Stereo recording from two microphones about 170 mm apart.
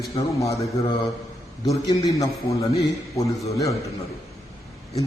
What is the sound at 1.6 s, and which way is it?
A man's voice, 20° left (ahead or behind).